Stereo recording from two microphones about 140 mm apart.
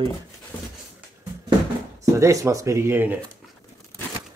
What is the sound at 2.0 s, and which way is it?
Speech, 20° right (ahead or behind).